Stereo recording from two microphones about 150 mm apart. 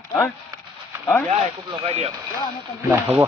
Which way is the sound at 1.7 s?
40° right (ahead or behind).